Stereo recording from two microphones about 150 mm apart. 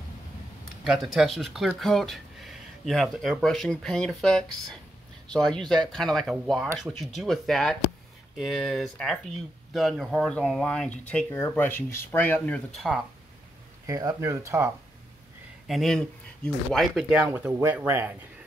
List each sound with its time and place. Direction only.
0.8 s speech: centre (ahead or behind)
13.8 s speech: 20° right (ahead or behind)
15.6 s speech: centre (ahead or behind)